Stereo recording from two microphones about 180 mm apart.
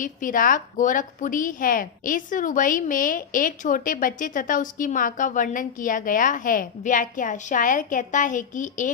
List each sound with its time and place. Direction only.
0.0 s a woman's voice: 45° left (ahead or behind)